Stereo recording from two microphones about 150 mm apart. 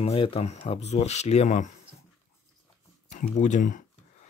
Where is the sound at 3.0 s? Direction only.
55° left (ahead or behind).